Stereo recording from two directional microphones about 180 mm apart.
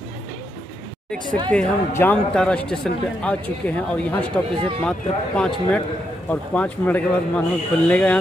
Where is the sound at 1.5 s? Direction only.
10° left (ahead or behind).